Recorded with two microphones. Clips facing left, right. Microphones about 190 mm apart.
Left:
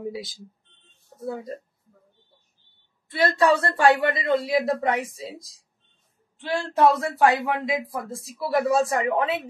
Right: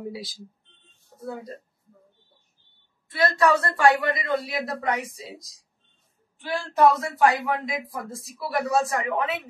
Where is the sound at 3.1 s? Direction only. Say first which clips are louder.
Left 1 dB; 30° left (ahead or behind).